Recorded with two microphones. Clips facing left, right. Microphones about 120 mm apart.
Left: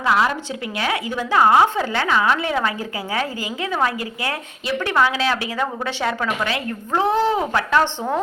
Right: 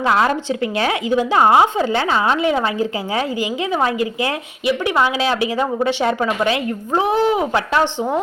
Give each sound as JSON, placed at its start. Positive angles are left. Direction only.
{"t": 0.0, "sound": "a woman's voice", "side_deg": -30}